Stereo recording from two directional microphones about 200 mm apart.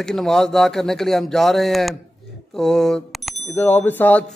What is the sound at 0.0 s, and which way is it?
A man's voice, centre (ahead or behind).